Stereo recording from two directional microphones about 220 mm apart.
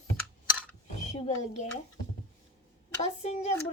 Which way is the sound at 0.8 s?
30° left (ahead or behind).